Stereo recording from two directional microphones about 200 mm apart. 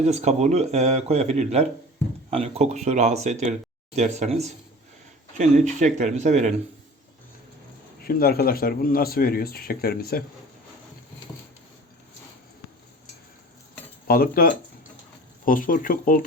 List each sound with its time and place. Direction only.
0.0 s speech: 35° right (ahead or behind)
8.0 s speech: 50° left (ahead or behind)
14.1 s speech: 50° left (ahead or behind)
15.4 s speech: 45° left (ahead or behind)